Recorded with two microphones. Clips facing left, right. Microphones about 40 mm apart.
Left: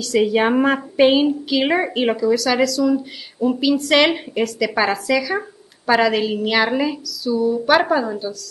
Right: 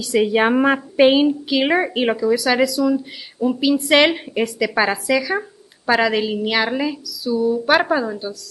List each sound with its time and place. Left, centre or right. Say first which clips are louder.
0.2 s a woman's voice: even; centre
2.3 s speech: even; centre
2.8 s a woman's voice: even; centre
3.7 s a woman's voice: right 2 dB; centre